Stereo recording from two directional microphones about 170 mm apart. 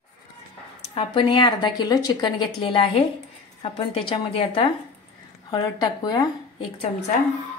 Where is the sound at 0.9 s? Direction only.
30° left (ahead or behind).